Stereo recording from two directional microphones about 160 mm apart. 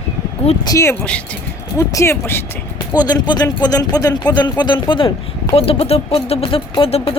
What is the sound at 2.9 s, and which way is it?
Speech, 25° left (ahead or behind).